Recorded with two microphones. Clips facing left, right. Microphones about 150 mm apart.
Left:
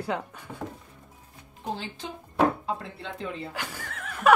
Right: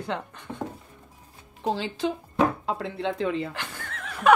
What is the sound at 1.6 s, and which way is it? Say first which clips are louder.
A woman's voice: right 8 dB; 90° right.